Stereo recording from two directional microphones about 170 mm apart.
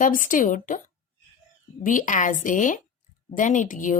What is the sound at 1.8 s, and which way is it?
Speech, 50° left (ahead or behind).